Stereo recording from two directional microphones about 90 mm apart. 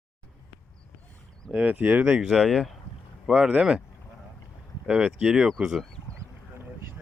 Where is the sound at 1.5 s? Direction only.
15° right (ahead or behind).